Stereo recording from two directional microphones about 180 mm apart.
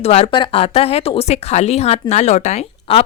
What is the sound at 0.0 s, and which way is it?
Speech, 35° left (ahead or behind).